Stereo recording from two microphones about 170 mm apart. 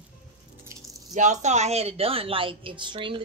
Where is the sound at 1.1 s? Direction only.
45° right (ahead or behind).